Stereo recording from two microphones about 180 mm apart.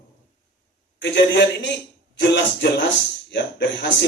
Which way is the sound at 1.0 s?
70° left (ahead or behind).